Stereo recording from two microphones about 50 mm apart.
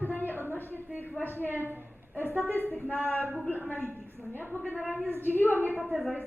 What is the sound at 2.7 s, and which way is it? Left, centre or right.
A woman's voice, left.